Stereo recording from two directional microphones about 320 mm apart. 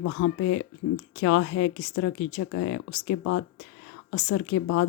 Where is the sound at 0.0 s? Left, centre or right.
Left.